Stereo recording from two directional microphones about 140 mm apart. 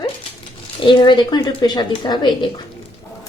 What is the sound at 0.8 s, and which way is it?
Speech, 35° left (ahead or behind).